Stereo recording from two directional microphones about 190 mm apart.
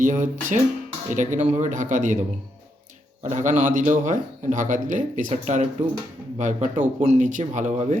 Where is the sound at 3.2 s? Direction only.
40° right (ahead or behind).